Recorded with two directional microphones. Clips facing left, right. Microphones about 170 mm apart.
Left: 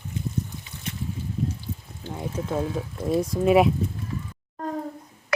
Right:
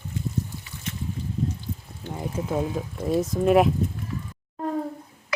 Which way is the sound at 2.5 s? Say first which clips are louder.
Even; 15° right (ahead or behind).